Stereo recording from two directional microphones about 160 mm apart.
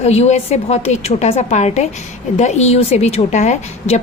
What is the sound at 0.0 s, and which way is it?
A woman's voice, 40° left (ahead or behind).